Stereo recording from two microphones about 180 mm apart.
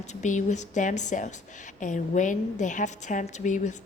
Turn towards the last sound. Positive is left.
turn(degrees=45)  # may be behind; listen again after turning